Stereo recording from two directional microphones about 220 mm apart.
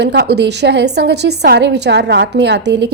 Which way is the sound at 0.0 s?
50° right (ahead or behind).